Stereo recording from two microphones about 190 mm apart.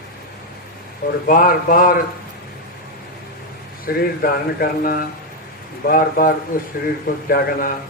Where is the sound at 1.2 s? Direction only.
50° left (ahead or behind).